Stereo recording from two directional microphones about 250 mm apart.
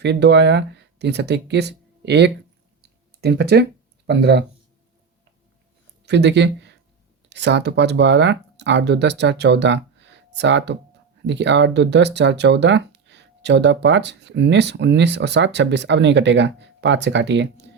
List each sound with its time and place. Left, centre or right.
0.0 s speech: right
6.1 s speech: right